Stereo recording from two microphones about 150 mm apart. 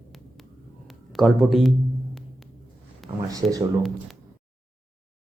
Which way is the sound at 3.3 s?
25° right (ahead or behind).